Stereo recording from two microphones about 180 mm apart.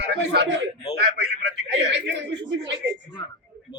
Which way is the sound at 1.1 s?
65° right (ahead or behind).